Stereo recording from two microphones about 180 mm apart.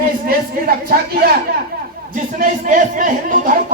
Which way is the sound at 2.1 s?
45° right (ahead or behind).